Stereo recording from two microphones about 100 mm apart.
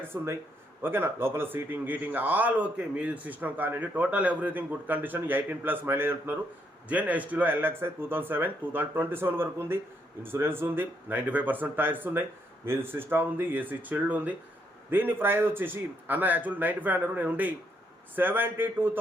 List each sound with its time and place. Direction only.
0.1 s speech: 25° right (ahead or behind)